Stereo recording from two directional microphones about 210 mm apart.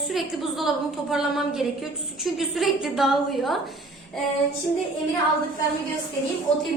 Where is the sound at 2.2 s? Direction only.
Centre (ahead or behind).